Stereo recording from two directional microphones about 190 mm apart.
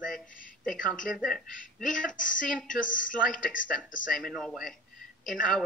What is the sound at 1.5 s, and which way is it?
A woman's voice, 45° left (ahead or behind).